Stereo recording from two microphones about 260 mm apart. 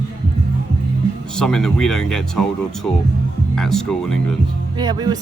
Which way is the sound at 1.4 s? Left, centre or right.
Centre.